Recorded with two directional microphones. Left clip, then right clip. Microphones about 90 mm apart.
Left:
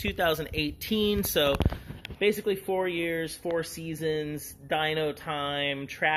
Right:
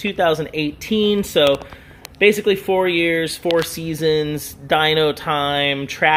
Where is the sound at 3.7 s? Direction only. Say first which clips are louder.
Right 12 dB; 50° right (ahead or behind).